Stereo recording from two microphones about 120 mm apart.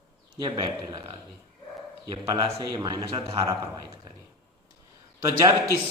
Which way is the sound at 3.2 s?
50° right (ahead or behind).